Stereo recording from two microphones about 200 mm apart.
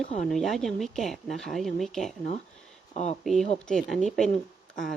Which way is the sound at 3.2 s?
Centre (ahead or behind).